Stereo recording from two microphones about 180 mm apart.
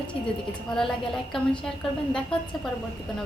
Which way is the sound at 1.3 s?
5° left (ahead or behind).